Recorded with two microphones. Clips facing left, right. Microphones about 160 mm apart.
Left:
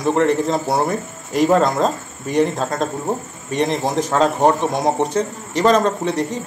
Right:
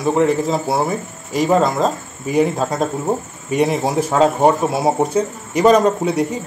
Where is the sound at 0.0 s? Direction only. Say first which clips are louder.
Right 1 dB; 5° right (ahead or behind).